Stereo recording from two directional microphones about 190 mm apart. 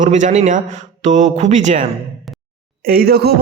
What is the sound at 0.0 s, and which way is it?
Speech, 40° right (ahead or behind).